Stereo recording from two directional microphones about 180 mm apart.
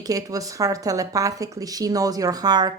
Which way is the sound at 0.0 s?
20° right (ahead or behind).